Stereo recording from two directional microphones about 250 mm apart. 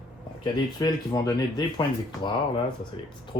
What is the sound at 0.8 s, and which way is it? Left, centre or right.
Speech, centre.